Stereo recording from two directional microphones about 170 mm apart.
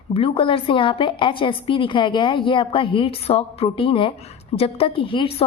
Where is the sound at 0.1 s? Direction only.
35° left (ahead or behind).